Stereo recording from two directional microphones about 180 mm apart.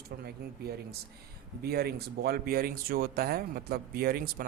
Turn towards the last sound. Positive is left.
turn(degrees=-55)  # may be behind; listen again after turning